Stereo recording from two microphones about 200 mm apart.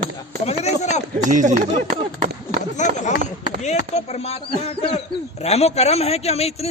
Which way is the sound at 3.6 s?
35° left (ahead or behind).